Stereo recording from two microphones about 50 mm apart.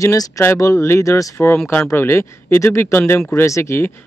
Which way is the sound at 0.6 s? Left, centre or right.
Left.